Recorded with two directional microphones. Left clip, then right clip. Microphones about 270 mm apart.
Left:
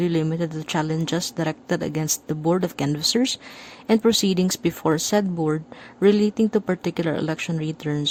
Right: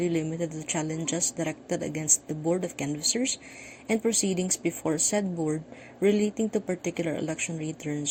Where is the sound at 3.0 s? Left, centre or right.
Left.